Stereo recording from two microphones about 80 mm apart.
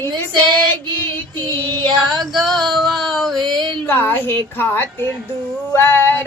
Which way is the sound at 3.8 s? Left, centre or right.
Left.